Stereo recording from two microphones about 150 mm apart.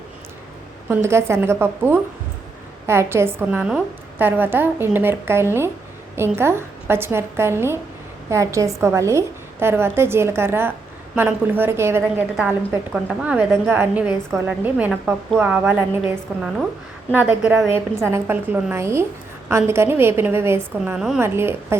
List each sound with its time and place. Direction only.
0.9 s a woman's voice: 15° right (ahead or behind)
20.8 s a woman's voice: 5° right (ahead or behind)
21.2 s a woman's voice: 15° right (ahead or behind)